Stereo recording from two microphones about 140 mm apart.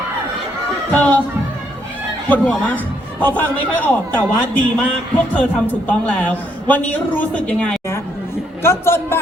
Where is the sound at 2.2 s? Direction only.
10° left (ahead or behind).